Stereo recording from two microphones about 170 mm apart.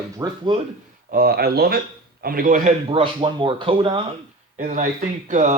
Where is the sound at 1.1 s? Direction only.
60° right (ahead or behind).